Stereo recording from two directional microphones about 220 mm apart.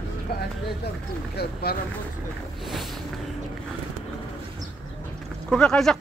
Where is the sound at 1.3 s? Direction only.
45° left (ahead or behind).